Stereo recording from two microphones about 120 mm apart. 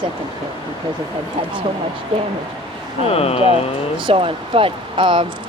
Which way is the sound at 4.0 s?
45° right (ahead or behind).